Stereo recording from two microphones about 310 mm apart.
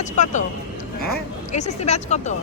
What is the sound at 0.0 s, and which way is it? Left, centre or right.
Speech, left.